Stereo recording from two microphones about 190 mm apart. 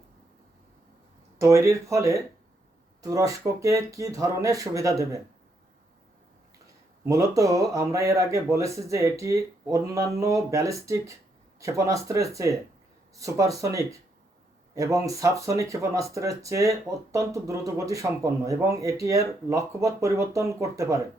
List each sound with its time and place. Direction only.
1.4 s speech: 15° right (ahead or behind)
7.0 s speech: 15° right (ahead or behind)